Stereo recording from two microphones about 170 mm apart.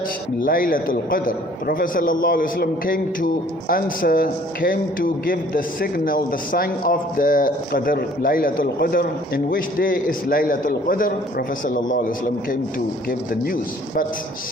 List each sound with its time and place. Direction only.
0.4 s a man's voice: 55° left (ahead or behind)